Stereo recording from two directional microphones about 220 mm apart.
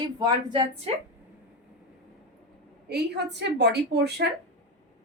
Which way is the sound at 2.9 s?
50° right (ahead or behind).